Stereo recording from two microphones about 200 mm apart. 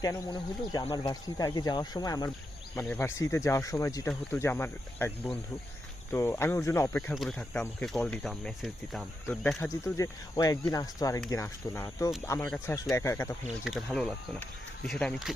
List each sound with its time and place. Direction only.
0.0 s speech: 20° left (ahead or behind)
7.1 s speech: centre (ahead or behind)
13.7 s speech: centre (ahead or behind)